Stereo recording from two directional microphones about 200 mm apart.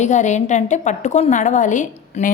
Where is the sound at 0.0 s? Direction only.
35° left (ahead or behind).